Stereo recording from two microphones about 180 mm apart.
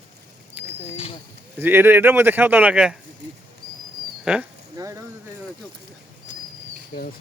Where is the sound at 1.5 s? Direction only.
10° right (ahead or behind).